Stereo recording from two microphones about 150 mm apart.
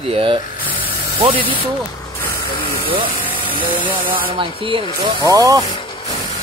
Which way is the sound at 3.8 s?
10° right (ahead or behind).